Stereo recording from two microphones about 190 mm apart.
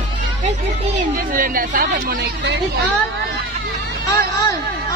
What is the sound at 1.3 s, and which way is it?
Speech, 45° right (ahead or behind).